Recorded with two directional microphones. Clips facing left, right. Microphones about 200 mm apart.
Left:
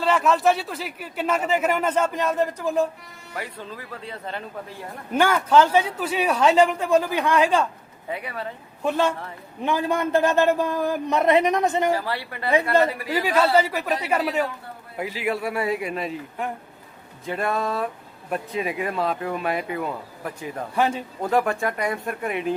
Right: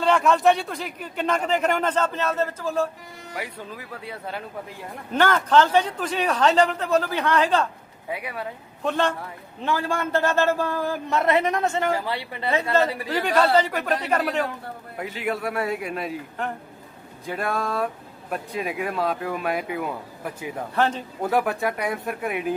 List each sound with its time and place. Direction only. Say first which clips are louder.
0.0 s a man's voice: right 1 dB; centre (ahead or behind)
3.3 s speech: left 1 dB; 10° right (ahead or behind)
5.1 s a man's voice: left 1 dB; 10° left (ahead or behind)
8.1 s speech: even; 10° right (ahead or behind)
8.8 s a man's voice: left 1 dB; 10° left (ahead or behind)
11.9 s speech: even; 15° right (ahead or behind)
12.7 s a man's voice: left 1 dB; 10° left (ahead or behind); by 20.6 s 5° right (ahead or behind)
20.7 s a man's voice: even; 10° left (ahead or behind)
21.2 s speech: left 1 dB; 5° right (ahead or behind)